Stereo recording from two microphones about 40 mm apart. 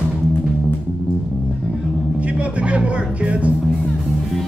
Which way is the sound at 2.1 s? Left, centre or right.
Right.